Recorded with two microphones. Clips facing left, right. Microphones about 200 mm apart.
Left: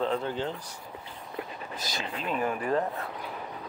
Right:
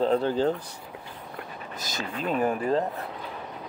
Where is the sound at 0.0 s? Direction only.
35° right (ahead or behind).